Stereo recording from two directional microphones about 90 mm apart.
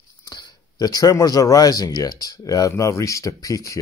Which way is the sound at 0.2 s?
50° left (ahead or behind).